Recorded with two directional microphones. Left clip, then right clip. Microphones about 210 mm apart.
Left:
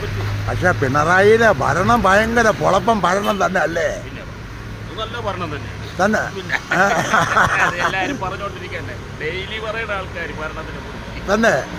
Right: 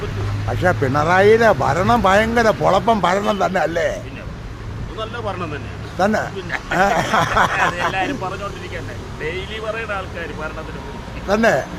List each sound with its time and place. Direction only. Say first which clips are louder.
0.6 s speech: left 1 dB; centre (ahead or behind)
6.0 s speech: left 1 dB; centre (ahead or behind)
9.2 s speech: left 1 dB; 65° right (ahead or behind)
11.3 s speech: even; centre (ahead or behind)